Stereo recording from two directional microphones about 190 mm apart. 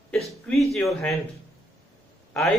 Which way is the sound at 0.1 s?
Centre (ahead or behind).